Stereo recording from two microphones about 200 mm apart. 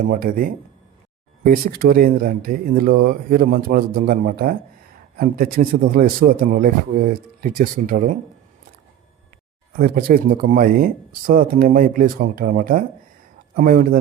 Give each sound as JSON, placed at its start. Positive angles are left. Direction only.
{"t": 0.0, "sound": "speech", "side_deg": -45}
{"t": 9.7, "sound": "speech", "side_deg": -45}